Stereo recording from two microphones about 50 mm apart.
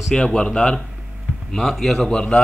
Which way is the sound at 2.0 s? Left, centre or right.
Centre.